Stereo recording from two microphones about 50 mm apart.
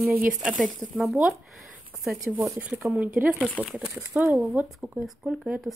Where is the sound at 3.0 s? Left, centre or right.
Right.